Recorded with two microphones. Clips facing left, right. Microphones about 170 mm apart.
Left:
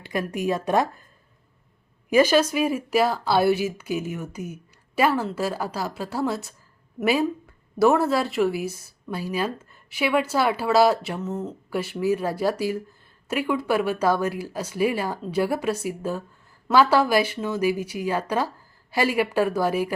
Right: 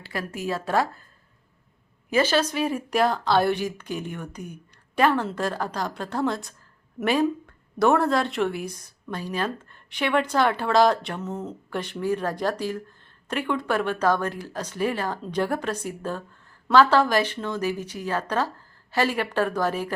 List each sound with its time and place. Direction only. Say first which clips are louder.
0.0 s speech: left 5 dB; 20° left (ahead or behind)
2.0 s speech: left 4 dB; 10° left (ahead or behind)